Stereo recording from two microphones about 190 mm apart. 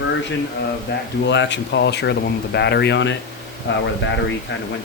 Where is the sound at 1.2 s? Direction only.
70° left (ahead or behind).